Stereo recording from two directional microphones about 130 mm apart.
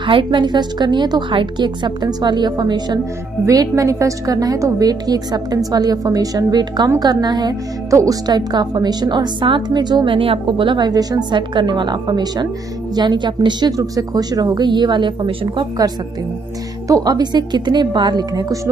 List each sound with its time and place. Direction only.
0.0 s a woman's voice: 40° right (ahead or behind)